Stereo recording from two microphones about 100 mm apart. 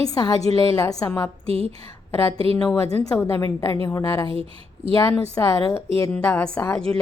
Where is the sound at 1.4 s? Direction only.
75° right (ahead or behind).